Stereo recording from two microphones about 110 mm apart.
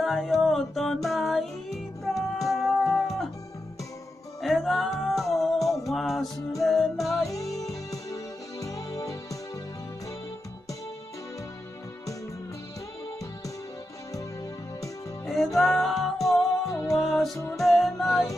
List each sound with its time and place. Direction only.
0.0 s music: centre (ahead or behind)
4.4 s music: centre (ahead or behind)
7.2 s music: 30° left (ahead or behind)
15.2 s music: centre (ahead or behind)